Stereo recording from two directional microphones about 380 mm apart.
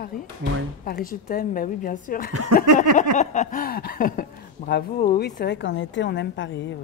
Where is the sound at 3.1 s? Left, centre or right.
Centre.